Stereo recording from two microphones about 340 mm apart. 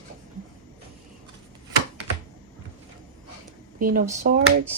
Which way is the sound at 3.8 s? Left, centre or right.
Right.